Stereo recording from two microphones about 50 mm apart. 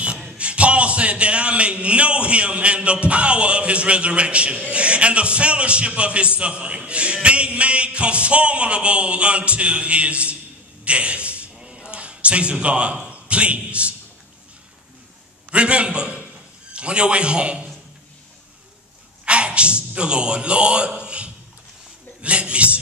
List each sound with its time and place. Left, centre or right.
0.4 s a man's voice: right
10.8 s a sound: right
11.9 s a man's voice: right
15.5 s a man's voice: right
19.2 s a sound: right
22.2 s a man's voice: right